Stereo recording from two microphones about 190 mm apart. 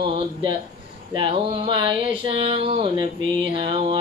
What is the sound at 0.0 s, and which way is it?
Speech, 25° right (ahead or behind).